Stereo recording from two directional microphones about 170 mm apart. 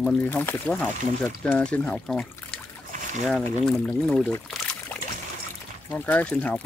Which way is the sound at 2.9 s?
45° right (ahead or behind).